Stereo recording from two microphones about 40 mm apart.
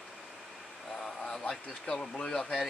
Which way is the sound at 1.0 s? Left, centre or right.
Centre.